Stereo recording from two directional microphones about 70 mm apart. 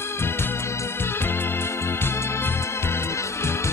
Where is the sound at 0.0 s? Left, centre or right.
Left.